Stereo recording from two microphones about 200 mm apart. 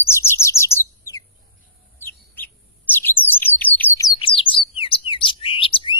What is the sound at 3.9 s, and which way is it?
Bird, 20° left (ahead or behind).